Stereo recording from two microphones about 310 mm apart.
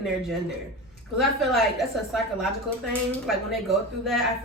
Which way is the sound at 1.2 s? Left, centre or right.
Centre.